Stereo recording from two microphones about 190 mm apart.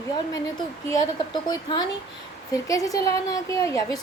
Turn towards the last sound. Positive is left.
turn(degrees=15)  # may be behind; listen again after turning